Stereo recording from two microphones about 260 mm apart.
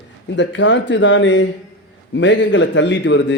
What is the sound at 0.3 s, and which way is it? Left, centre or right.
A man's voice, left.